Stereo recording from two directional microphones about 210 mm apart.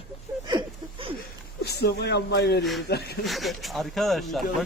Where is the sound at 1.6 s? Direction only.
50° left (ahead or behind).